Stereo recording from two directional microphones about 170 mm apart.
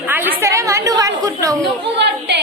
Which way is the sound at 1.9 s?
85° right.